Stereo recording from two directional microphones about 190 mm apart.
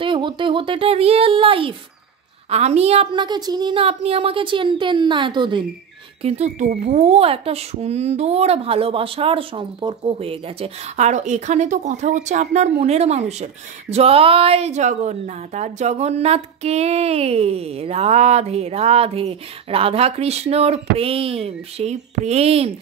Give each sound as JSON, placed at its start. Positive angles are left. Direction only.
{"t": 0.0, "sound": "a woman's voice", "side_deg": -25}
{"t": 6.2, "sound": "a child's voice", "side_deg": -35}